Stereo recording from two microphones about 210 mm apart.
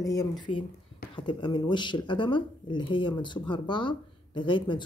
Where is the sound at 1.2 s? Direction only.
20° left (ahead or behind).